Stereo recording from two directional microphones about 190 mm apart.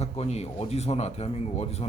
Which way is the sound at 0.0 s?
35° left (ahead or behind).